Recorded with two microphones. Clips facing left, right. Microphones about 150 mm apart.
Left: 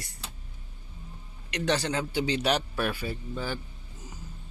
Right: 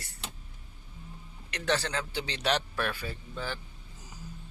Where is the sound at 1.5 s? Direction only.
15° left (ahead or behind).